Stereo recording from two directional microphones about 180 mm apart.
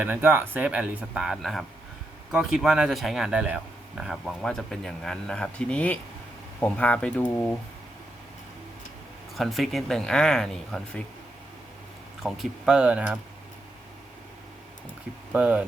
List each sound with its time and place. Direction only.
0.0 s speech: 10° right (ahead or behind); by 7.5 s 5° left (ahead or behind)
9.4 s speech: centre (ahead or behind)
12.2 s speech: 5° right (ahead or behind)
15.3 s speech: 5° right (ahead or behind)